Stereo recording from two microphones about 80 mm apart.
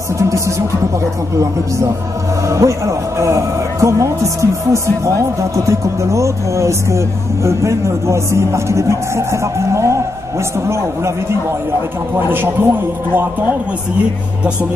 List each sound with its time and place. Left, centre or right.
0.2 s speech: right
2.4 s a man's voice: right